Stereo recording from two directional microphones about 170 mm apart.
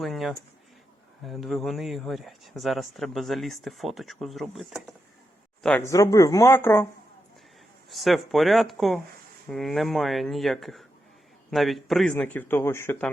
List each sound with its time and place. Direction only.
0.0 s speech: centre (ahead or behind)
5.9 s speech: 20° left (ahead or behind)
7.9 s speech: centre (ahead or behind)